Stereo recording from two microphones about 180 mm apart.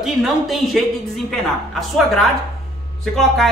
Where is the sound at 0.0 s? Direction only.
Centre (ahead or behind).